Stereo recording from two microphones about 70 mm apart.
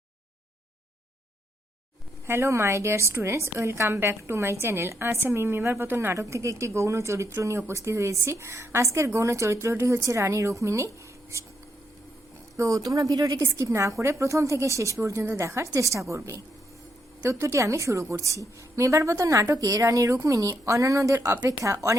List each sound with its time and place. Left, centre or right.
2.2 s a woman's voice: right
6.1 s speech: right
12.5 s a woman's voice: right
13.4 s speech: right